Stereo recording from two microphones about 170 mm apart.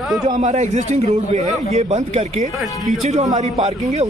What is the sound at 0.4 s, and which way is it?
A man's voice, 45° right (ahead or behind).